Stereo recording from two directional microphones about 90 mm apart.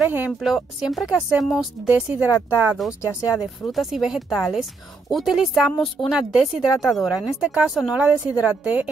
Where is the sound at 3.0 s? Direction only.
35° left (ahead or behind).